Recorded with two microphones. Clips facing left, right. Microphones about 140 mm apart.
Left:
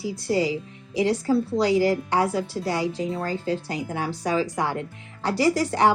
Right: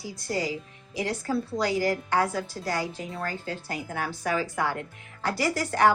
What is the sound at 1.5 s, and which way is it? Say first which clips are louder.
A woman's voice: left 4 dB; 30° left (ahead or behind).